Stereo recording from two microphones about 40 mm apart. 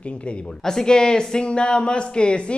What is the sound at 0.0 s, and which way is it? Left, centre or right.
Speech, left.